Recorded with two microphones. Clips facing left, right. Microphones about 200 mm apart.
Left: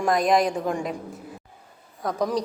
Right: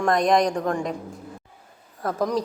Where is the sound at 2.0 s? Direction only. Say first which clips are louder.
Right 1 dB; centre (ahead or behind).